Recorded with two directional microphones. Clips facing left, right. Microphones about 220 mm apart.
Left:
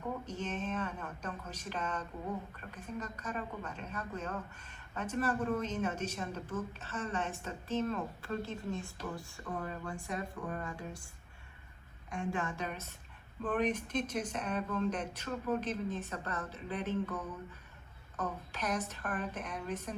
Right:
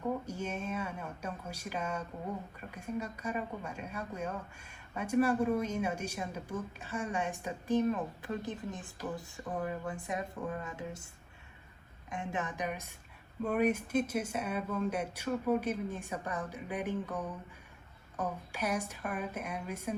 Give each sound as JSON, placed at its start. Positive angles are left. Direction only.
{"t": 0.3, "sound": "speech", "side_deg": -10}
{"t": 12.1, "sound": "speech", "side_deg": -20}